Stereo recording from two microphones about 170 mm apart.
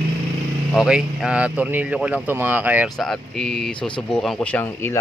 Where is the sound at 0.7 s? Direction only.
5° right (ahead or behind).